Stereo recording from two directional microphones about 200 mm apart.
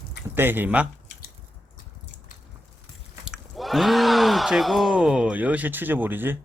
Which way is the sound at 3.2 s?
Centre (ahead or behind).